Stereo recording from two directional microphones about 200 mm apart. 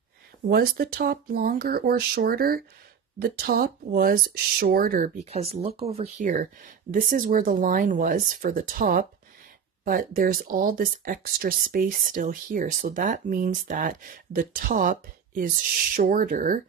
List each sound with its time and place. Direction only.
0.5 s speech: 50° right (ahead or behind)